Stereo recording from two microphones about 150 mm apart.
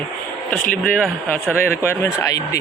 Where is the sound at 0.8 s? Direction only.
5° left (ahead or behind).